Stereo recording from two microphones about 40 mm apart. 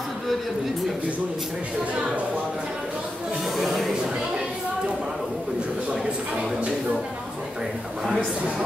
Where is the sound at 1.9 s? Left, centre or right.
Right.